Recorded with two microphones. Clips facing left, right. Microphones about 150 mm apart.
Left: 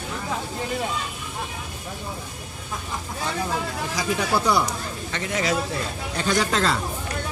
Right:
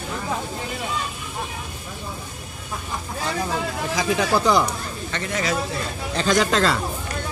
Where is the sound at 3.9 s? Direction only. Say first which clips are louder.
Right 3 dB; 90° right.